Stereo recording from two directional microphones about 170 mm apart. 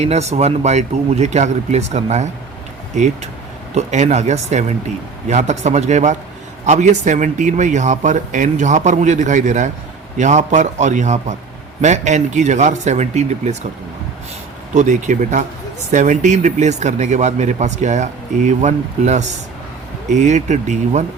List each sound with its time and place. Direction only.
0.0 s speech: 40° right (ahead or behind)
14.7 s speech: 45° right (ahead or behind)